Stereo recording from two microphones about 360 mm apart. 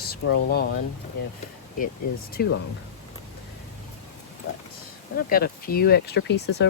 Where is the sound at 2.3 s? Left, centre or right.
Left.